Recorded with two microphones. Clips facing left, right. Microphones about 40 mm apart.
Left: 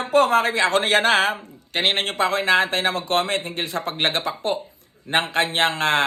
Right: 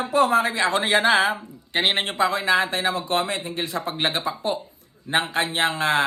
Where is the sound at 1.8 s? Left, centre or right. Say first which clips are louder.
Even; centre.